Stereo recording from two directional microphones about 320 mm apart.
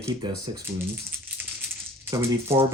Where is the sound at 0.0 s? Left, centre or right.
Centre.